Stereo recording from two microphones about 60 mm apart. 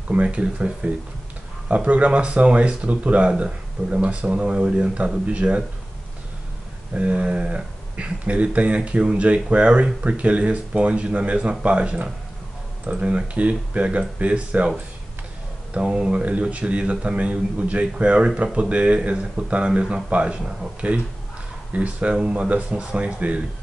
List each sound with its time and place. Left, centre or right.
0.1 s a man's voice: right
6.9 s a man's voice: right
15.7 s a man's voice: centre